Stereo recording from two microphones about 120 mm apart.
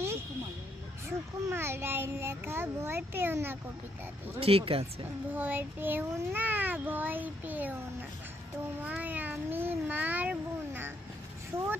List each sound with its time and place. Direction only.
1.0 s a child's voice: 20° right (ahead or behind)
4.4 s speech: 55° right (ahead or behind)
5.3 s a child's voice: 15° right (ahead or behind)
8.8 s a child's voice: 15° right (ahead or behind)